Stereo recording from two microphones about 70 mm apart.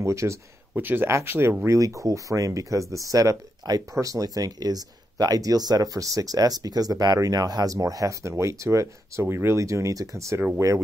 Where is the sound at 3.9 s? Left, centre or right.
Right.